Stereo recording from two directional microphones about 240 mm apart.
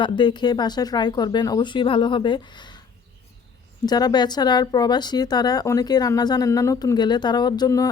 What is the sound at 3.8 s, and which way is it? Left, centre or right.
Speech, centre.